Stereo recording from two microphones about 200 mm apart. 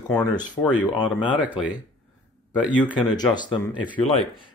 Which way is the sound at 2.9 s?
20° left (ahead or behind).